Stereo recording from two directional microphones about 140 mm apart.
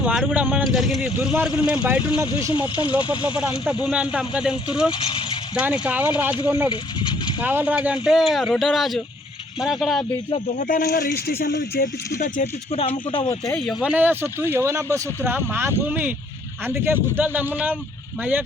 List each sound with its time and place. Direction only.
0.0 s speech: 5° right (ahead or behind)
2.2 s speech: 35° left (ahead or behind)
3.3 s speech: 5° right (ahead or behind)
4.9 s speech: 40° left (ahead or behind)
5.8 s speech: 10° right (ahead or behind)
6.7 s speech: 35° left (ahead or behind)
7.4 s speech: 10° right (ahead or behind)
10.6 s speech: 85° left
12.7 s speech: 40° left (ahead or behind)
13.6 s speech: centre (ahead or behind)